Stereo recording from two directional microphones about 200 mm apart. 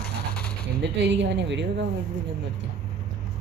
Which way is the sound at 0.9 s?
60° right (ahead or behind).